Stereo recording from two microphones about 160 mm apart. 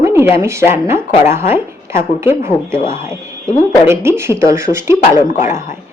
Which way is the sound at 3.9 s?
15° right (ahead or behind).